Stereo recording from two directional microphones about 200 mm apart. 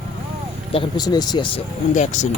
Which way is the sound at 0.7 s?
25° left (ahead or behind).